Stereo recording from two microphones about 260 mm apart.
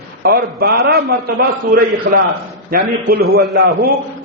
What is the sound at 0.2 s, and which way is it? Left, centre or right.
A man's voice, right.